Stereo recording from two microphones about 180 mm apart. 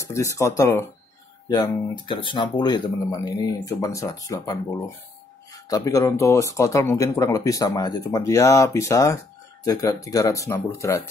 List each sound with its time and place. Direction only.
0.1 s speech: 15° left (ahead or behind)
2.0 s speech: 25° left (ahead or behind)